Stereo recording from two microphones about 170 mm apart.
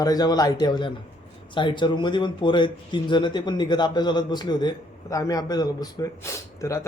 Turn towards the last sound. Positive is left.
turn(degrees=15)  # may be behind; listen again after turning